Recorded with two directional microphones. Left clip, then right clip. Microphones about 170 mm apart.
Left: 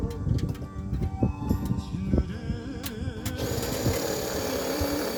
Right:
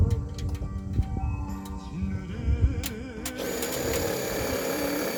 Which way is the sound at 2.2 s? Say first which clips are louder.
Even; 35° left (ahead or behind).